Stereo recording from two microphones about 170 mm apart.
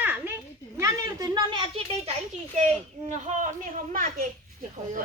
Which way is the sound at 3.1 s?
45° right (ahead or behind).